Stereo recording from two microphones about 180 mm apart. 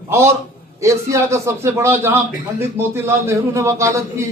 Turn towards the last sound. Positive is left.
turn(degrees=-15)  # may be behind; listen again after turning